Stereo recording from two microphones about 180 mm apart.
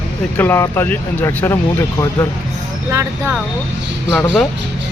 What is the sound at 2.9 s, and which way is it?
Speech, 15° right (ahead or behind).